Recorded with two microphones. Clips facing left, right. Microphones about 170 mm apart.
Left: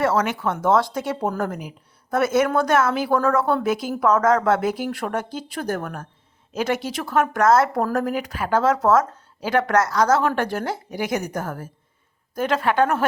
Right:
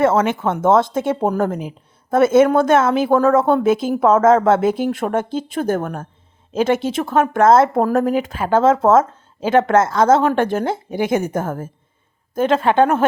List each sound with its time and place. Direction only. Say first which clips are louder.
0.0 s speech: right 5 dB; 25° right (ahead or behind)